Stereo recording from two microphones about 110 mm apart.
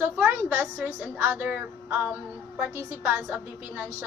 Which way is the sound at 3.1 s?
15° right (ahead or behind).